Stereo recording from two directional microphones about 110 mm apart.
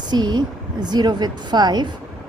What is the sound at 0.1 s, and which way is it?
A woman's voice, 40° right (ahead or behind).